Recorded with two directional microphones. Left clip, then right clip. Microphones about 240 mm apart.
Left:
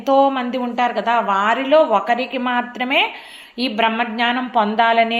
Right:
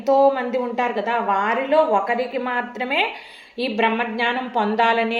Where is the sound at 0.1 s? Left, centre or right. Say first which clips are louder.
Left 1 dB; left.